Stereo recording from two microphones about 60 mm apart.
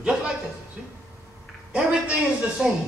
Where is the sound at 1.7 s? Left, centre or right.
Centre.